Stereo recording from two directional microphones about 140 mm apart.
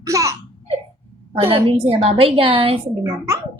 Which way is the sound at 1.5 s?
40° right (ahead or behind).